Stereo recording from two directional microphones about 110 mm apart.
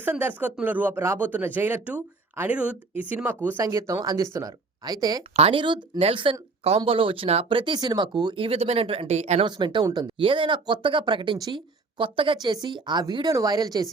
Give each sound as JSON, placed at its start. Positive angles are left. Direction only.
{"t": 0.0, "sound": "speech", "side_deg": -20}
{"t": 3.6, "sound": "speech", "side_deg": -30}
{"t": 5.4, "sound": "speech", "side_deg": -50}
{"t": 7.6, "sound": "speech", "side_deg": -40}
{"t": 8.4, "sound": "speech", "side_deg": -70}
{"t": 9.4, "sound": "speech", "side_deg": -45}
{"t": 10.2, "sound": "speech", "side_deg": -50}
{"t": 11.9, "sound": "speech", "side_deg": -50}